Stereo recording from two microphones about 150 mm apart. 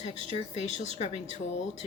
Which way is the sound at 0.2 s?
50° left (ahead or behind).